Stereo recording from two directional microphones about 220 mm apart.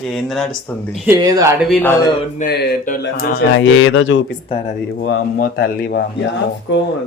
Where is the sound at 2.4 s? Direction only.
45° left (ahead or behind).